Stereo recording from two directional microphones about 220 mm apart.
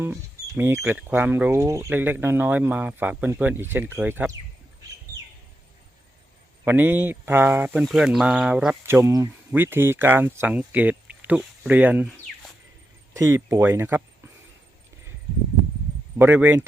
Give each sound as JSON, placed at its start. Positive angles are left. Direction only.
{"t": 0.0, "sound": "speech", "side_deg": -10}
{"t": 6.7, "sound": "speech", "side_deg": -10}
{"t": 13.1, "sound": "speech", "side_deg": -10}
{"t": 16.1, "sound": "speech", "side_deg": -10}